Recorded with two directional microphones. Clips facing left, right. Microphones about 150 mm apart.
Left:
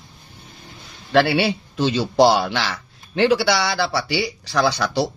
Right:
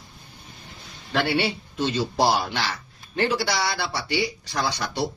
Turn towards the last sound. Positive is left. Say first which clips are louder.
# left 7 dB
turn(degrees=85)